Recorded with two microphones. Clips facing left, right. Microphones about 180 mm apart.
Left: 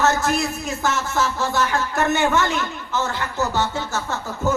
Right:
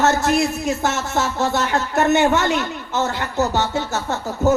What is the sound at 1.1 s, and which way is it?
A woman's voice, 45° right (ahead or behind).